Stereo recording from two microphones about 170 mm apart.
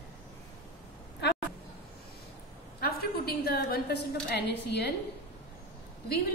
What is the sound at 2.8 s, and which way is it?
A woman's voice, 65° left (ahead or behind).